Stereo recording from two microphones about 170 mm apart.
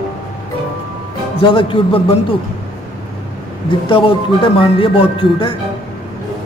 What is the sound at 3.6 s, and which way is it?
Speech, 30° left (ahead or behind).